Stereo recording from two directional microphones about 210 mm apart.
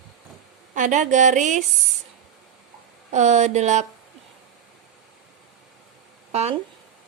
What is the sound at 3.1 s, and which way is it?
Speech, 35° right (ahead or behind).